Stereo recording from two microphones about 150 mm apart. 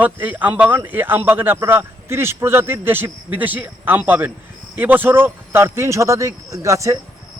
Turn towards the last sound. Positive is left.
turn(degrees=-20)  # may be behind; listen again after turning